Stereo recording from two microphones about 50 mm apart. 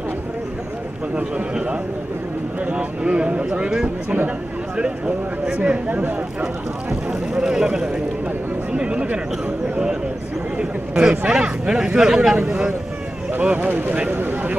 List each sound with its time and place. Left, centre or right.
1.1 s speech: right
10.6 s speech: centre
13.4 s speech: right